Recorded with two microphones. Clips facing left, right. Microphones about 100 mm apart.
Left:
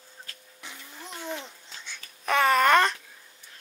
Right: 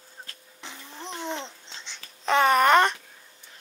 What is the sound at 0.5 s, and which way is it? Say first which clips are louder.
Babbling: right 3 dB; 30° right (ahead or behind).